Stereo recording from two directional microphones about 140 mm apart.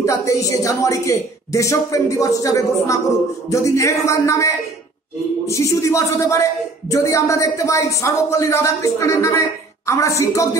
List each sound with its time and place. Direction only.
0.0 s speech: 20° left (ahead or behind)